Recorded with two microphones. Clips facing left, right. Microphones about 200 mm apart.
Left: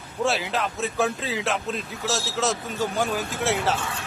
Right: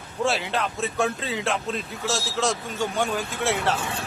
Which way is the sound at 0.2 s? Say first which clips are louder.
Even; centre (ahead or behind).